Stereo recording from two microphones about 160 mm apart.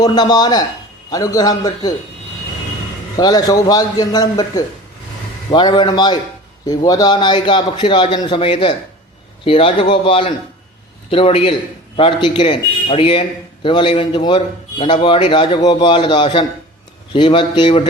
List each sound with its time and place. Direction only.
0.0 s a man's voice: 25° left (ahead or behind)
3.2 s a man's voice: 25° left (ahead or behind)